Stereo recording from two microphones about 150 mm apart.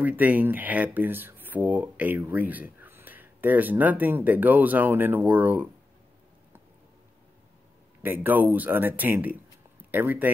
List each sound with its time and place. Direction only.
0.0 s speech: 10° right (ahead or behind)
8.0 s speech: 15° right (ahead or behind)